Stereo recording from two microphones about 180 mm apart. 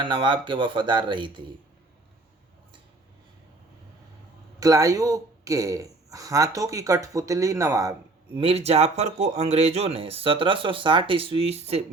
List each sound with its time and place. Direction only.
0.0 s speech: 25° right (ahead or behind)
4.6 s a man's voice: 20° right (ahead or behind)
8.4 s speech: 35° right (ahead or behind)